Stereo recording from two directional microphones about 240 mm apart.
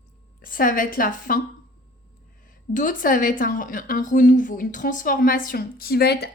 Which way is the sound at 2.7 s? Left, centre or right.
Left.